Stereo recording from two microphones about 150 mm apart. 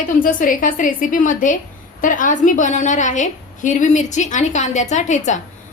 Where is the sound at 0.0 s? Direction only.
60° left (ahead or behind).